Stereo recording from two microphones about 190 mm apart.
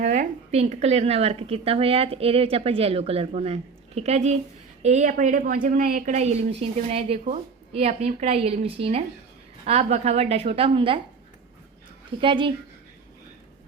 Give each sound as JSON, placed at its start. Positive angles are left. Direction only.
{"t": 0.0, "sound": "a woman's voice", "side_deg": -40}
{"t": 12.2, "sound": "speech", "side_deg": -25}